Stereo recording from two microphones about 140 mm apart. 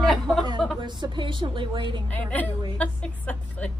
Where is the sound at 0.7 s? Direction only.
35° right (ahead or behind).